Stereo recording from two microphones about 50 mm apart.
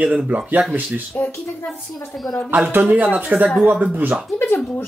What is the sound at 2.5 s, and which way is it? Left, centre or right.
Speech, right.